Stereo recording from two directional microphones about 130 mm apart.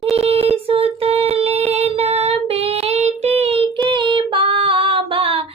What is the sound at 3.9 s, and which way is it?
Child singing, 40° right (ahead or behind).